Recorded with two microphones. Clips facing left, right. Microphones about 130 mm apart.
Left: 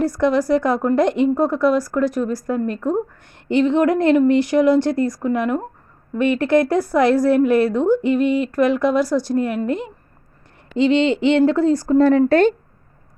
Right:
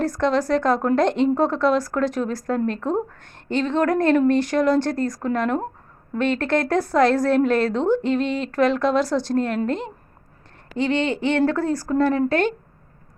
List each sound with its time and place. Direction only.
0.0 s a woman's voice: 10° left (ahead or behind); by 12.5 s 30° left (ahead or behind)